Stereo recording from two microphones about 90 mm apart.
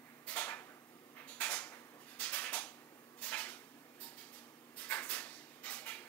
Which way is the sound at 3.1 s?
20° left (ahead or behind).